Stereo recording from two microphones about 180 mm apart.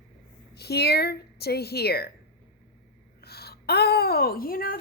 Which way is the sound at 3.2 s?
60° left (ahead or behind).